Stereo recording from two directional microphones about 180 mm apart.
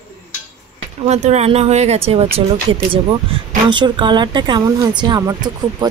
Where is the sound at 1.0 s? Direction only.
40° right (ahead or behind).